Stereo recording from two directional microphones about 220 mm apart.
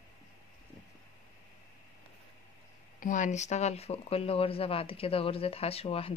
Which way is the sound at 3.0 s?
35° left (ahead or behind).